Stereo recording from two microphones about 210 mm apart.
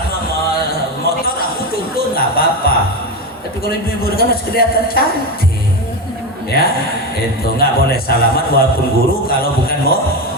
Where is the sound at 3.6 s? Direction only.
45° left (ahead or behind).